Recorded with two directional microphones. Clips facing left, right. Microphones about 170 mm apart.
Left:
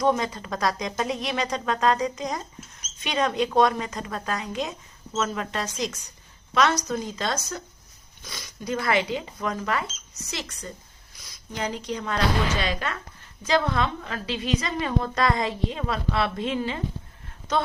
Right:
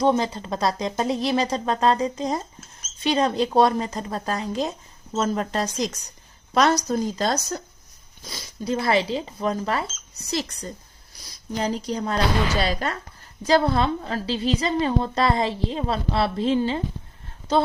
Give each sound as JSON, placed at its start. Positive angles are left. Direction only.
{"t": 0.0, "sound": "a woman's voice", "side_deg": -30}